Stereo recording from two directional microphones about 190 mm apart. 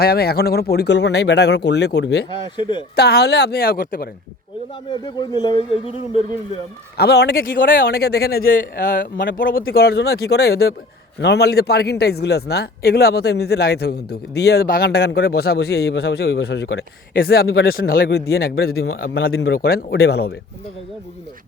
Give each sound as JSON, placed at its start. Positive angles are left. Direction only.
{"t": 0.0, "sound": "speech", "side_deg": 55}
{"t": 2.6, "sound": "speech", "side_deg": 25}
{"t": 2.9, "sound": "speech", "side_deg": 60}
{"t": 4.7, "sound": "speech", "side_deg": 25}
{"t": 6.9, "sound": "a man's voice", "side_deg": 60}